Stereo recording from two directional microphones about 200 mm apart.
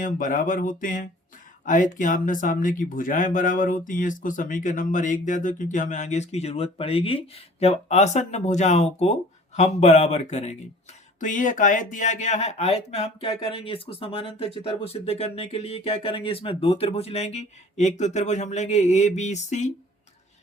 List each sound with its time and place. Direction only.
0.0 s speech: 40° left (ahead or behind)